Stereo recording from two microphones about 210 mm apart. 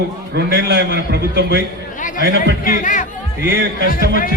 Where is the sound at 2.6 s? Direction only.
40° left (ahead or behind).